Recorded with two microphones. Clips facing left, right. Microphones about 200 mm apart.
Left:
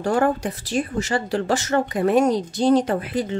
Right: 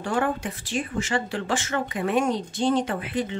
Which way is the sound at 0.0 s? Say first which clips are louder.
Left 5 dB; 40° left (ahead or behind).